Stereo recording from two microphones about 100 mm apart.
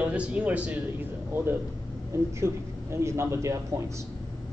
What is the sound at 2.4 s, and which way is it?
Speech, 25° right (ahead or behind).